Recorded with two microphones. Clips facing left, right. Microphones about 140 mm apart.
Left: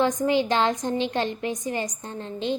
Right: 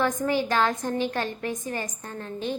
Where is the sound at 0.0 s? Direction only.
20° left (ahead or behind).